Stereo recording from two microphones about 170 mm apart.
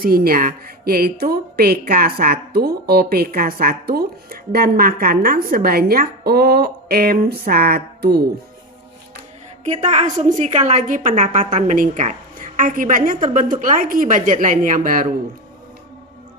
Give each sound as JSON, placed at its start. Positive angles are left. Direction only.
{"t": 0.0, "sound": "speech", "side_deg": -60}
{"t": 9.6, "sound": "a woman's voice", "side_deg": -40}